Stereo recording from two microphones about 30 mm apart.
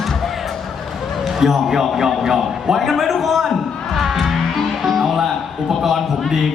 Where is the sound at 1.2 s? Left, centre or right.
Centre.